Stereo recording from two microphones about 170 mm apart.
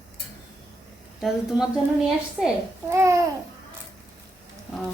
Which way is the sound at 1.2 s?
Centre (ahead or behind).